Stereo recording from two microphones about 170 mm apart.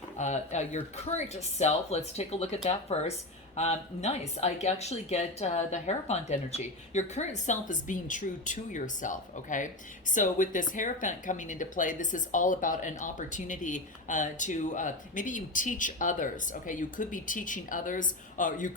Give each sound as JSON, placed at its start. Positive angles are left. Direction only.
{"t": 0.2, "sound": "speech", "side_deg": 45}